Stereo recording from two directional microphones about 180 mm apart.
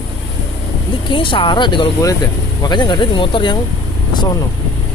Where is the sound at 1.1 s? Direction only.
30° left (ahead or behind).